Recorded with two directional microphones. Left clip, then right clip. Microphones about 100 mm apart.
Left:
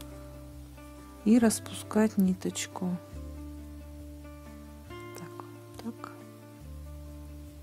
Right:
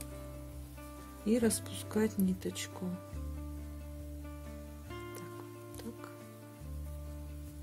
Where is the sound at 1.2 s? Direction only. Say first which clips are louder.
Left 6 dB; 90° left.